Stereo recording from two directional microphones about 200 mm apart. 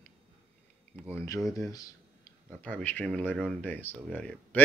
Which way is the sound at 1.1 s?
15° left (ahead or behind).